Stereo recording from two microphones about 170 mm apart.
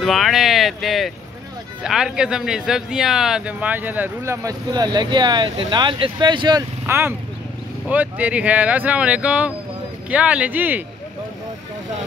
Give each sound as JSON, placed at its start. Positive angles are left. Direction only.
{"t": 0.0, "sound": "speech", "side_deg": 0}
{"t": 6.9, "sound": "speech", "side_deg": -15}